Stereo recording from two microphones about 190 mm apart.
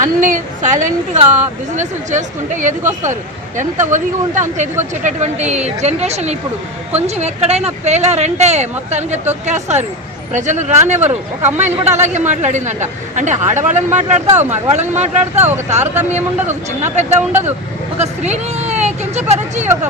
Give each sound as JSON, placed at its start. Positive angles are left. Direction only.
{"t": 0.0, "sound": "a woman's voice", "side_deg": -45}